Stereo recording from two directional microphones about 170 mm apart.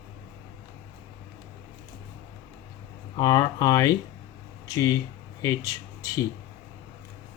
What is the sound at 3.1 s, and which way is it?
Speech, 20° left (ahead or behind).